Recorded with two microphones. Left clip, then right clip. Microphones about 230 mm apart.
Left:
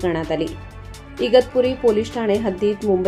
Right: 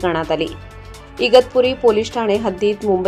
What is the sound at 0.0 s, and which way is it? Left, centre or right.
A woman's voice, centre.